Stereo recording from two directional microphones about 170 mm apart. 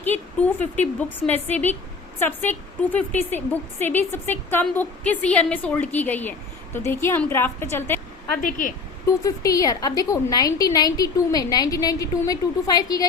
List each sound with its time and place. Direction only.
0.0 s a woman's voice: 10° left (ahead or behind)
8.4 s speech: 50° left (ahead or behind)
9.2 s a woman's voice: 20° left (ahead or behind)